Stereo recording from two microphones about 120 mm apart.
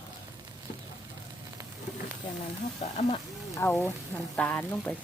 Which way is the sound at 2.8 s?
60° left (ahead or behind).